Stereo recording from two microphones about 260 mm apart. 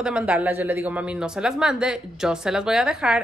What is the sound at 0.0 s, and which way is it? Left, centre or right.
A woman's voice, centre.